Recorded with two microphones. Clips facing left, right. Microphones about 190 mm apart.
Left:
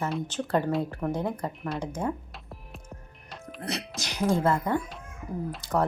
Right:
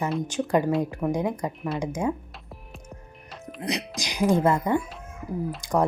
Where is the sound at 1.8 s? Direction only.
10° right (ahead or behind).